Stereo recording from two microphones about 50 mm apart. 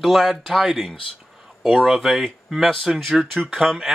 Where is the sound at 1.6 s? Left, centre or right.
Centre.